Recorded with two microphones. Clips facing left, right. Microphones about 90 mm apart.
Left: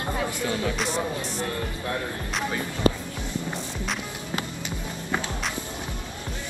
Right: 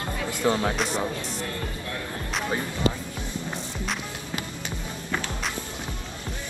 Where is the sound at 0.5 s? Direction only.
40° right (ahead or behind).